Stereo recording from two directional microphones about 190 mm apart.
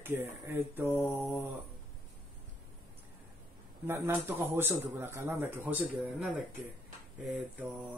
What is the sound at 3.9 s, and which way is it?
A man's voice, 10° right (ahead or behind).